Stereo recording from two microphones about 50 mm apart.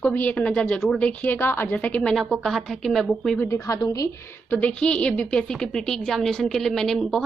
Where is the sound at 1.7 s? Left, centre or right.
Left.